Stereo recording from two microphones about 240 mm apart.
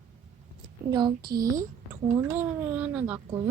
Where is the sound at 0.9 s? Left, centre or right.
Centre.